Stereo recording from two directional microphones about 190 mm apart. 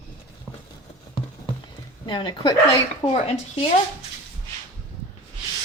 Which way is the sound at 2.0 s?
25° left (ahead or behind).